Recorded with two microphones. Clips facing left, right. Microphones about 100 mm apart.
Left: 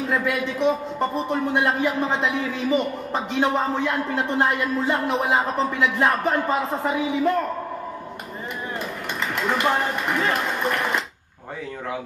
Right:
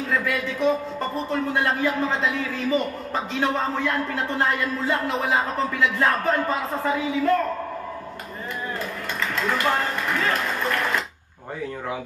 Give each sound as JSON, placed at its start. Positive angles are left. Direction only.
{"t": 0.0, "sound": "a man's voice", "side_deg": 20}
{"t": 9.3, "sound": "speech", "side_deg": 20}